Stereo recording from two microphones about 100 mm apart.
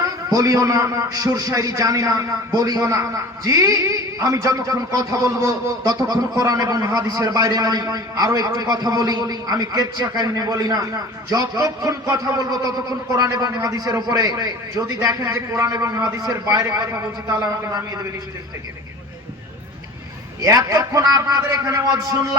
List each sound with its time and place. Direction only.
0.3 s a man's voice: 35° right (ahead or behind)
20.4 s a man's voice: 35° right (ahead or behind)